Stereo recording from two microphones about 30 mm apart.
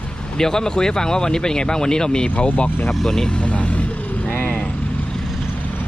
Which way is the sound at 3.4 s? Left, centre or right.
Left.